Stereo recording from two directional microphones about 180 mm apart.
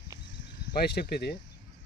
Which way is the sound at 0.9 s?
60° left (ahead or behind).